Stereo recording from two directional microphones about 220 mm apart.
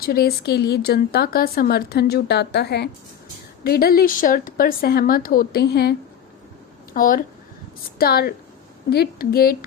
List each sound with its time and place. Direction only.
0.0 s speech: 45° left (ahead or behind)